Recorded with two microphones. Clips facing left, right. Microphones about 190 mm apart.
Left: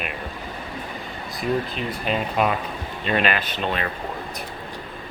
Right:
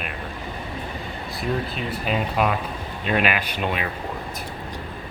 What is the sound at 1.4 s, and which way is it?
Speech, 5° right (ahead or behind).